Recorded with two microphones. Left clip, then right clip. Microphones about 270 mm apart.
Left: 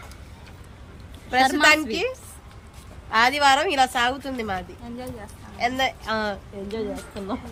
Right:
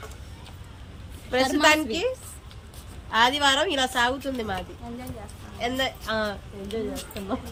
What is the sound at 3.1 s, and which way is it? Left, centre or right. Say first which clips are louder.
A woman's voice: left 3 dB; centre.